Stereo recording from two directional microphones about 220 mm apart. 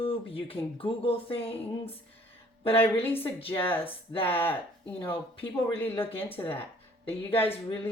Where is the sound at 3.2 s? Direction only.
25° left (ahead or behind).